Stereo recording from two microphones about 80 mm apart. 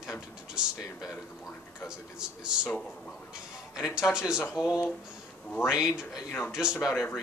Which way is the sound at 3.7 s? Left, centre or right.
Centre.